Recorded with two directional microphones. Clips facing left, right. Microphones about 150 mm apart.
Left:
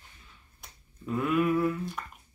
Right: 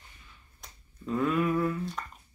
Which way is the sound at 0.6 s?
10° left (ahead or behind).